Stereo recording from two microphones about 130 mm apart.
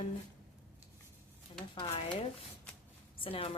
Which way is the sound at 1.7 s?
40° left (ahead or behind).